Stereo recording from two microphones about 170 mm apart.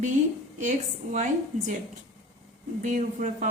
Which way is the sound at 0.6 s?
45° right (ahead or behind).